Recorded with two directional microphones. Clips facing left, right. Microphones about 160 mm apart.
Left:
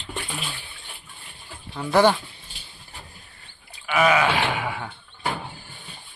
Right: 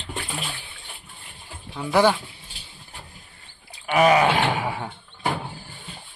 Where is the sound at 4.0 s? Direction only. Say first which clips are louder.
Right 3 dB; 35° right (ahead or behind).